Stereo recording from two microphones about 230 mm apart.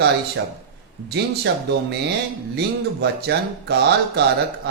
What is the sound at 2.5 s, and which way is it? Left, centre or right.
Speech, right.